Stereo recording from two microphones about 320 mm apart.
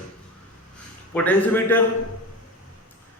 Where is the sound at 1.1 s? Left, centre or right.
Centre.